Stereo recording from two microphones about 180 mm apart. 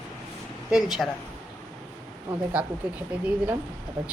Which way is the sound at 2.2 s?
10° right (ahead or behind).